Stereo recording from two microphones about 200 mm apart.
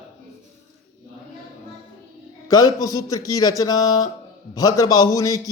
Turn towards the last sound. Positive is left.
turn(degrees=15)  # may be behind; listen again after turning